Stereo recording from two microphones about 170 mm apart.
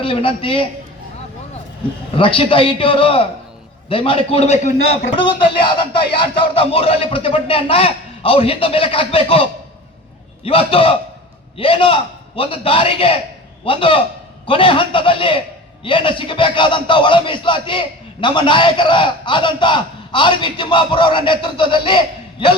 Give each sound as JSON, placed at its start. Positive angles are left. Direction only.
{"t": 0.0, "sound": "speech", "side_deg": 30}
{"t": 2.1, "sound": "a man's voice", "side_deg": 30}